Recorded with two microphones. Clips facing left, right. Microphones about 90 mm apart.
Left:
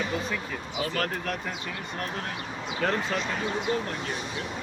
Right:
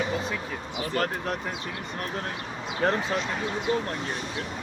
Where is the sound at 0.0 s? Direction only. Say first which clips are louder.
Right 1 dB; 20° right (ahead or behind).